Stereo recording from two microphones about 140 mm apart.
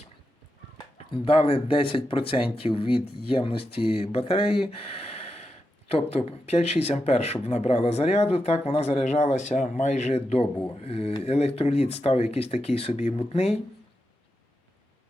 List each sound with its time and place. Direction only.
1.1 s speech: 40° left (ahead or behind)